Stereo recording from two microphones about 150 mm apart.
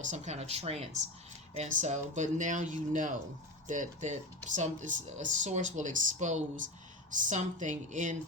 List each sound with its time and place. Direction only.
0.0 s speech: 50° right (ahead or behind)